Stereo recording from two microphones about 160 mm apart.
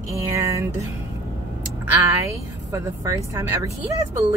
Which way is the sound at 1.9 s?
20° right (ahead or behind).